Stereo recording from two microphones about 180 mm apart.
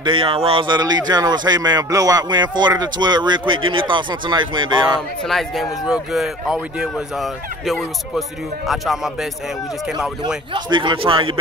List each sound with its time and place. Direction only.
0.0 s speech: 30° right (ahead or behind)
5.3 s speech: centre (ahead or behind)
8.6 s speech: centre (ahead or behind)
10.2 s speech: 25° right (ahead or behind)